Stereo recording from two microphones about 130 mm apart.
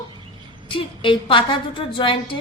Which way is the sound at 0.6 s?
40° left (ahead or behind).